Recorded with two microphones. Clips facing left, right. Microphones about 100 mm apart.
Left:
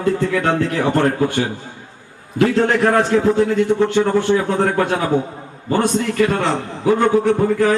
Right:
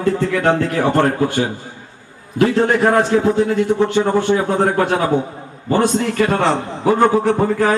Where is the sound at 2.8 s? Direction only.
20° right (ahead or behind).